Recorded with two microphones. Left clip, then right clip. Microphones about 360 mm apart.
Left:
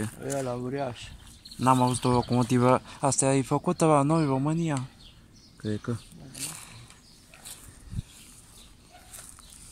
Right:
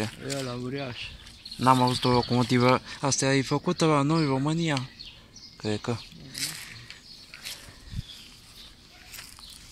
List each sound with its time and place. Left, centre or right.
0.3 s speech: left
1.6 s speech: centre
5.7 s speech: right
6.3 s a sound: centre